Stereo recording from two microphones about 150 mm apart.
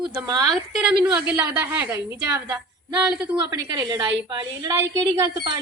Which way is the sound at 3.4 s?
30° right (ahead or behind).